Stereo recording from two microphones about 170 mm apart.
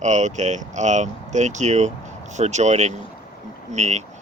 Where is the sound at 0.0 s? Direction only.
45° right (ahead or behind).